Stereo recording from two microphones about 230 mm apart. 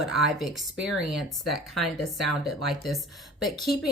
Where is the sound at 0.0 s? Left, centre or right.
Centre.